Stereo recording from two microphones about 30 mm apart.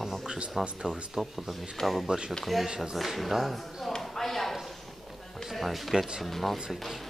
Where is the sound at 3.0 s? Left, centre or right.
Centre.